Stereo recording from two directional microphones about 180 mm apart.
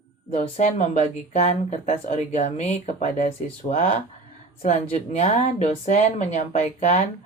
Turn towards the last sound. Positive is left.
turn(degrees=40)  # may be behind; listen again after turning